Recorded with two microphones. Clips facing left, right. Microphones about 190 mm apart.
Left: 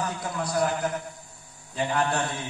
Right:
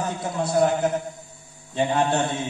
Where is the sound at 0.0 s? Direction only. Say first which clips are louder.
Right 4 dB; 25° right (ahead or behind).